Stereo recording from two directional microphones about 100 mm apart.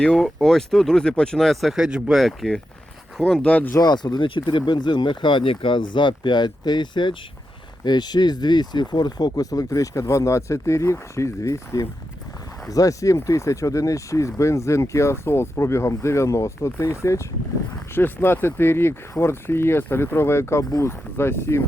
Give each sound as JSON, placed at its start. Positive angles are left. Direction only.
{"t": 0.0, "sound": "speech", "side_deg": 5}
{"t": 3.8, "sound": "speech", "side_deg": 45}